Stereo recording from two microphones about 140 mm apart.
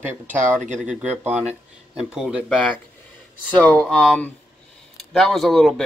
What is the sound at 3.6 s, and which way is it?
Speech, 10° left (ahead or behind).